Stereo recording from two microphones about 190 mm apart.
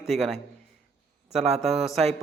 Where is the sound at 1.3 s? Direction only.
35° right (ahead or behind).